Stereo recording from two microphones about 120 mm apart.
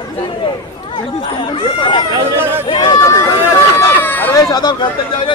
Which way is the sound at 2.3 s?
20° right (ahead or behind).